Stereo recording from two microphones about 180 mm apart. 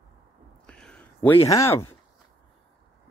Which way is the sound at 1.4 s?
15° left (ahead or behind).